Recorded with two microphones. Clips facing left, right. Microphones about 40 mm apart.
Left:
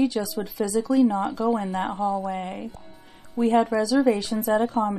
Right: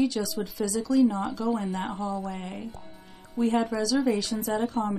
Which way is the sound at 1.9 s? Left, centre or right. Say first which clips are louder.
Left 6 dB; centre.